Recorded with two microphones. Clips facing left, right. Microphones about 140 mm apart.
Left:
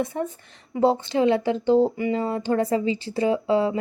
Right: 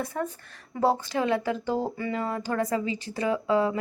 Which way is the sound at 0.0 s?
20° left (ahead or behind).